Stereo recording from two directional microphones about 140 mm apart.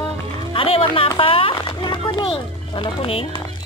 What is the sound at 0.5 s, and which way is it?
Speech, 40° left (ahead or behind).